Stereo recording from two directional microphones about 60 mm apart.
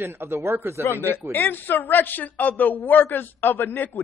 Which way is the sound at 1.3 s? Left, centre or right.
Left.